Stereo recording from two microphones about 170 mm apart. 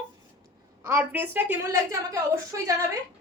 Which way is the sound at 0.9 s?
10° right (ahead or behind).